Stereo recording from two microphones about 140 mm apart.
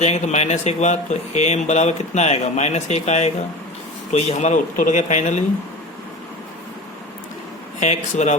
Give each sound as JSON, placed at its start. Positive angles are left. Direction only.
{"t": 0.0, "sound": "speech", "side_deg": 55}
{"t": 7.8, "sound": "speech", "side_deg": 55}